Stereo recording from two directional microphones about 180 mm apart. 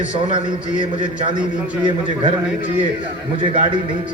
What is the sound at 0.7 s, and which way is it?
A man's voice, 25° right (ahead or behind).